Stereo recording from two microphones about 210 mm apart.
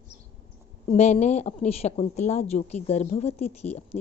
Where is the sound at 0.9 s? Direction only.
30° left (ahead or behind).